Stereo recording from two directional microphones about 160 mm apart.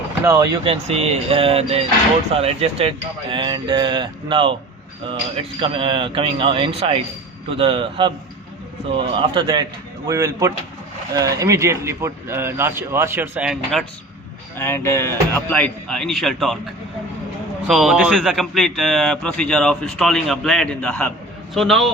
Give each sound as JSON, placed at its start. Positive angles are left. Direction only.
{"t": 0.3, "sound": "speech", "side_deg": -20}
{"t": 0.6, "sound": "speech", "side_deg": -35}
{"t": 10.1, "sound": "a man's voice", "side_deg": -20}
{"t": 14.6, "sound": "speech", "side_deg": 15}
{"t": 17.7, "sound": "a man's voice", "side_deg": -5}